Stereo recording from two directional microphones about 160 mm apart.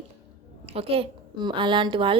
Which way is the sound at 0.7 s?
40° right (ahead or behind).